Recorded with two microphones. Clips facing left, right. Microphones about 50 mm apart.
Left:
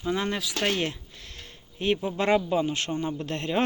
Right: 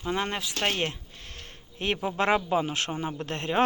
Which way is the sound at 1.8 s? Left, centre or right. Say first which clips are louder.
Left 1 dB; right.